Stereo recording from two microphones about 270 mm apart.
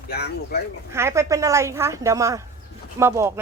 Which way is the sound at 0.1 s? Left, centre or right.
Left.